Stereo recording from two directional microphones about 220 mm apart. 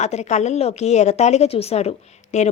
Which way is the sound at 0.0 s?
30° left (ahead or behind).